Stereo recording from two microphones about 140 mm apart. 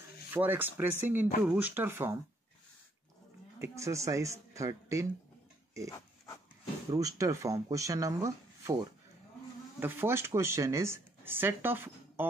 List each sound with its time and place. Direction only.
0.3 s speech: 15° right (ahead or behind)
3.5 s speech: 20° right (ahead or behind)
5.9 s dog: 25° left (ahead or behind)
6.9 s speech: 25° right (ahead or behind)
9.8 s speech: 15° right (ahead or behind)